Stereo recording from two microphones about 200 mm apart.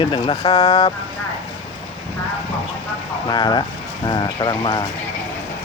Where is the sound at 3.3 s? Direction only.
20° left (ahead or behind).